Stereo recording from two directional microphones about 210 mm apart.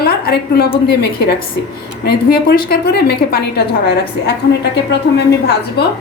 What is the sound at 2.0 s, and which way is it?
A woman's voice, 45° left (ahead or behind).